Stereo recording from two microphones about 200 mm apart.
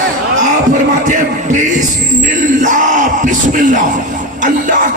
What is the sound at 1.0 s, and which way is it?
Speech, 40° right (ahead or behind).